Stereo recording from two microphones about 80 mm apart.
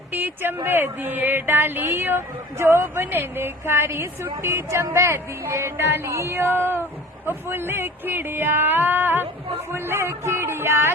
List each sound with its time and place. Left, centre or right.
0.1 s speech: right